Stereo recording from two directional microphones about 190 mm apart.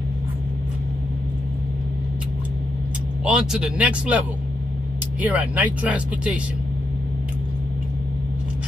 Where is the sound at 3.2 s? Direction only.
5° right (ahead or behind).